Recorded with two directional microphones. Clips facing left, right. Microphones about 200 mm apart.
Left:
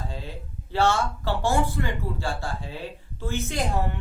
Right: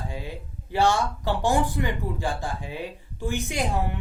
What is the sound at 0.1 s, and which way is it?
Speech, 15° right (ahead or behind).